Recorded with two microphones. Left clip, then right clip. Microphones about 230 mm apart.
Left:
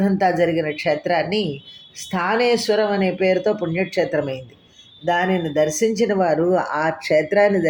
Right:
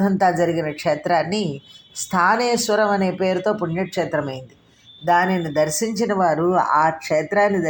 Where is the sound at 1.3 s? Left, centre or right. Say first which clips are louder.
Left 2 dB; right.